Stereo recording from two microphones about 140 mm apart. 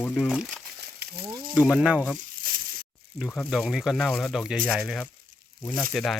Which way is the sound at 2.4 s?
90° right.